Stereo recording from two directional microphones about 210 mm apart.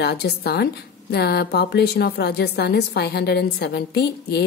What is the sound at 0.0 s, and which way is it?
A woman's voice, 50° left (ahead or behind).